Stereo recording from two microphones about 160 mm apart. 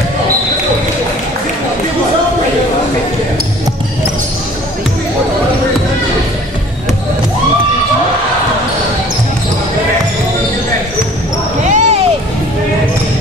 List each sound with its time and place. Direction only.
11.6 s basketball bounce: 45° right (ahead or behind)